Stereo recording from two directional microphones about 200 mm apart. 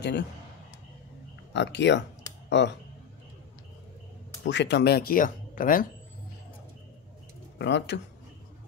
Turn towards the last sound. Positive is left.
turn(degrees=60)  # may be behind; listen again after turning